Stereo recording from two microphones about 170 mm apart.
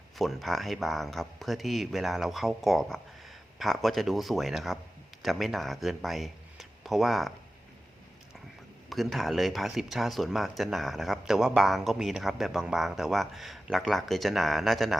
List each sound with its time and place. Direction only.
0.2 s speech: centre (ahead or behind)
8.9 s speech: centre (ahead or behind)